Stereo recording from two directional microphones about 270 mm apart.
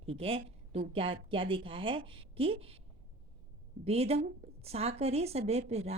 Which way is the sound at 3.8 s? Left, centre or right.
Right.